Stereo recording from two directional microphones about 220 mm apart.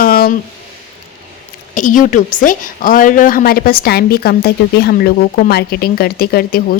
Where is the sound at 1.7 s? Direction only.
35° left (ahead or behind).